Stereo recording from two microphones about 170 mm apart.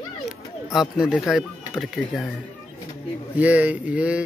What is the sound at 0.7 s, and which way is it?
Speech, 5° right (ahead or behind).